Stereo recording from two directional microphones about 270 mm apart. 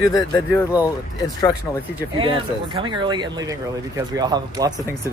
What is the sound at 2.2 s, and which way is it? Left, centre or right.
Speech, centre.